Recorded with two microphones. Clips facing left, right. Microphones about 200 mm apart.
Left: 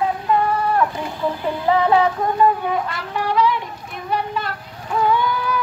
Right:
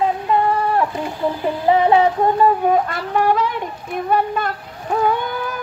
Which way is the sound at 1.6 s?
20° right (ahead or behind).